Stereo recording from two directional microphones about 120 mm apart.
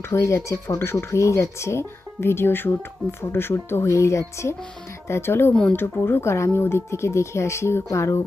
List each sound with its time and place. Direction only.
0.1 s speech: 25° left (ahead or behind)